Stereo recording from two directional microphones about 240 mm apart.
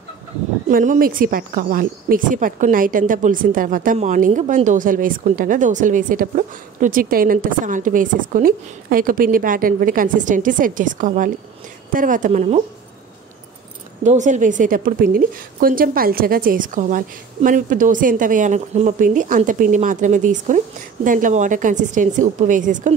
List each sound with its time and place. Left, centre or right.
0.7 s speech: right
14.0 s speech: right